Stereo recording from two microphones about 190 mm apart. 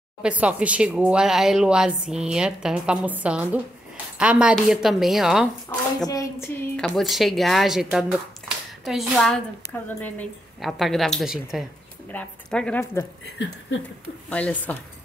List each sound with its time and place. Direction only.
0.2 s speech: 5° right (ahead or behind)
6.0 s a sound: 20° left (ahead or behind)
6.8 s a woman's voice: centre (ahead or behind)
14.3 s a woman's voice: 5° left (ahead or behind)